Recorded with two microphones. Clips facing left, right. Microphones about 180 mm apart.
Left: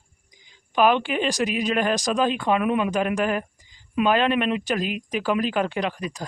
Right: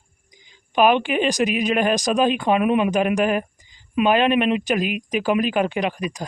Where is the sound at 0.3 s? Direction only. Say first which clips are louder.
Right 4 dB; 20° right (ahead or behind).